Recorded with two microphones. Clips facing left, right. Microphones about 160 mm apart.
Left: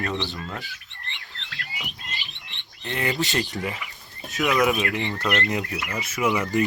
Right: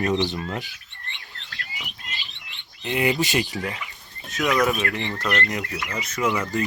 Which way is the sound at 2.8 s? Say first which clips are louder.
Right 4 dB; 15° right (ahead or behind).